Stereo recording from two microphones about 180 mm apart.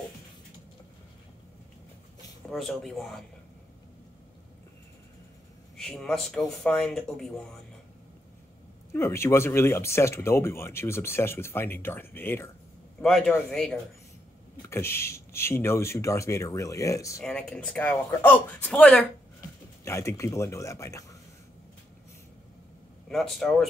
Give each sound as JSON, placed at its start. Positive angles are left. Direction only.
{"t": 2.5, "sound": "speech", "side_deg": 0}
{"t": 5.8, "sound": "speech", "side_deg": 0}
{"t": 8.9, "sound": "speech", "side_deg": 15}
{"t": 14.7, "sound": "speech", "side_deg": 15}
{"t": 17.2, "sound": "speech", "side_deg": 5}
{"t": 23.0, "sound": "speech", "side_deg": 0}